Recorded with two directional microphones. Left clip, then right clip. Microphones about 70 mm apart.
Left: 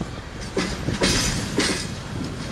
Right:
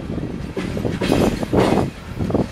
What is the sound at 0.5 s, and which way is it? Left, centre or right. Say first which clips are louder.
Train: even; left.